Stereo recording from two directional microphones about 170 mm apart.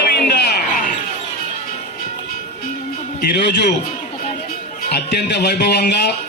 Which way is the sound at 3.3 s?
90° left.